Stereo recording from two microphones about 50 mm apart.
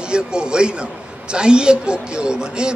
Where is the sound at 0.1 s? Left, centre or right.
Centre.